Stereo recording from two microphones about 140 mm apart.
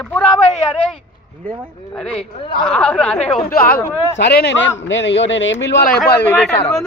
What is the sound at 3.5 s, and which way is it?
Speech, 90° left.